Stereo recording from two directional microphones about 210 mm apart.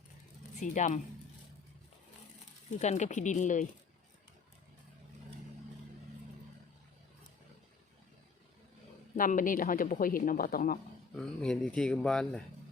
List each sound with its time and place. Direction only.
0.6 s speech: 35° left (ahead or behind)
2.7 s speech: 35° left (ahead or behind)
9.1 s speech: 40° left (ahead or behind)
11.3 s speech: 5° left (ahead or behind)